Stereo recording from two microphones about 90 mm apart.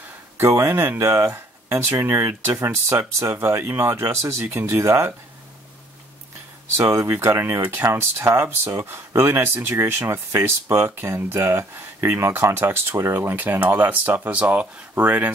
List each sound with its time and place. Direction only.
0.4 s speech: 30° right (ahead or behind)
6.8 s speech: 35° right (ahead or behind)